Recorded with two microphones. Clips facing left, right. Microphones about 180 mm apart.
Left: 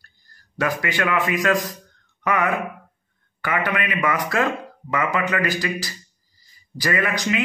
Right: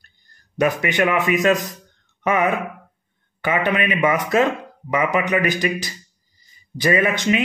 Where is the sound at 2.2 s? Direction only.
25° right (ahead or behind).